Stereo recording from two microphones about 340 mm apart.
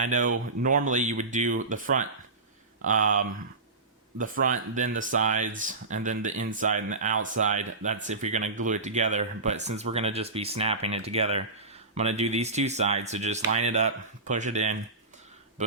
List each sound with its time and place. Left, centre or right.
0.0 s speech: right